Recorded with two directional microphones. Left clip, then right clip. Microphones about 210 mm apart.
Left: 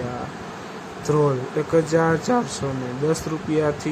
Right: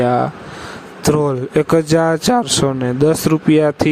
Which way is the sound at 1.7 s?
45° right (ahead or behind).